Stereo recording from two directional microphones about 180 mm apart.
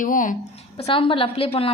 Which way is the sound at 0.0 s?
45° left (ahead or behind).